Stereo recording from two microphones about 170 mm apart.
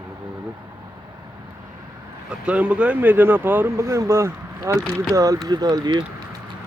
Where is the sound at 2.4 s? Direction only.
10° right (ahead or behind); by 6.0 s 25° right (ahead or behind).